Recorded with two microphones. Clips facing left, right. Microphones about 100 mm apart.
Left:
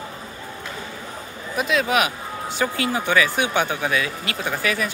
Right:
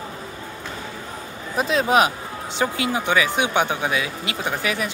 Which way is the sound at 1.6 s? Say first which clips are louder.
Right 2 dB; 35° right (ahead or behind).